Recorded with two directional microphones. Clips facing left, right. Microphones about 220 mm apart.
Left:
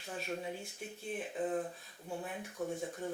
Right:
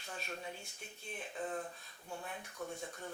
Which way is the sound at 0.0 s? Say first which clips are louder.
Left 6 dB; 5° left (ahead or behind).